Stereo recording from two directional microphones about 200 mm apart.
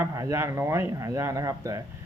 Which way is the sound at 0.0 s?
15° right (ahead or behind).